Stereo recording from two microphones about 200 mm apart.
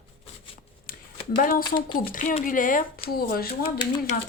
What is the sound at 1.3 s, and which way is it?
Speech, 45° left (ahead or behind).